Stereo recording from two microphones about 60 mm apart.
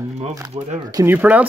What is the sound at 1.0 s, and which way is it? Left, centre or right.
Speech, right.